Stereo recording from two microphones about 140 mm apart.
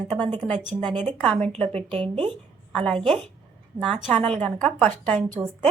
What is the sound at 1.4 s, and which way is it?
Speech, 45° right (ahead or behind).